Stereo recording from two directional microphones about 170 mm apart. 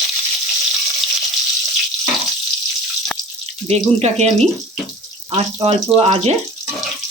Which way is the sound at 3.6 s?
40° right (ahead or behind).